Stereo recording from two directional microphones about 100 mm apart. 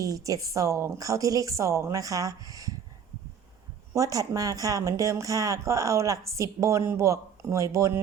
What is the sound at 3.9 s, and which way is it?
Speech, 35° right (ahead or behind).